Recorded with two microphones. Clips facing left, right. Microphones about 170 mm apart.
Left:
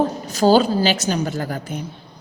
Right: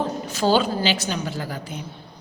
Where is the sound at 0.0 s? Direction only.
40° left (ahead or behind).